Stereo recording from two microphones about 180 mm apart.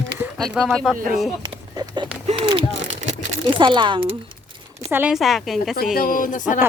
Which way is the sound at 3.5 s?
25° right (ahead or behind).